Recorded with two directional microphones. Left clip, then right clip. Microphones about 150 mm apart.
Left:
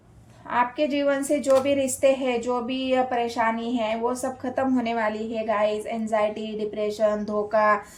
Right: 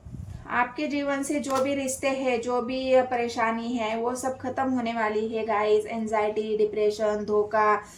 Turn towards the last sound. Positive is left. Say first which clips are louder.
# left 1 dB
turn(degrees=50)  # may be behind; listen again after turning